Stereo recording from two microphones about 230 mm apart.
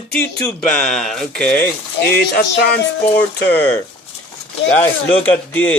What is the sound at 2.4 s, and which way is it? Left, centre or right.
Music, left.